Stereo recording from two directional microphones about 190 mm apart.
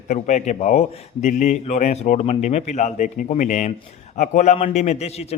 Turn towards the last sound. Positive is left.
turn(degrees=35)  # may be behind; listen again after turning